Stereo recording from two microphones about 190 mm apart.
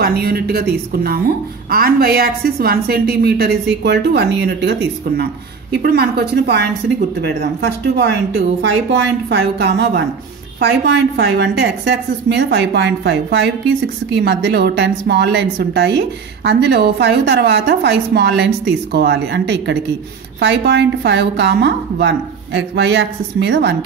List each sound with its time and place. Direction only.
0.0 s a woman's voice: 55° right (ahead or behind)
7.6 s a woman's voice: 65° right (ahead or behind)